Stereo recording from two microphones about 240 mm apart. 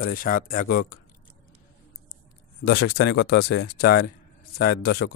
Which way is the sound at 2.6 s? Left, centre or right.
Left.